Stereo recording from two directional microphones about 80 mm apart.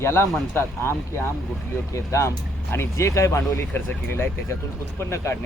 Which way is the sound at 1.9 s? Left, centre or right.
Left.